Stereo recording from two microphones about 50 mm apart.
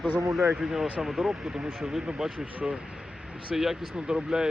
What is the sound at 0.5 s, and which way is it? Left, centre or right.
Speech, centre.